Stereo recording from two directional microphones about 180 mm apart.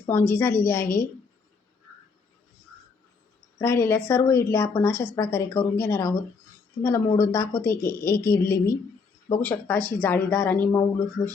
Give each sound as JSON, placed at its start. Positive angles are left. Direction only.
{"t": 0.0, "sound": "speech", "side_deg": 15}
{"t": 3.6, "sound": "speech", "side_deg": 15}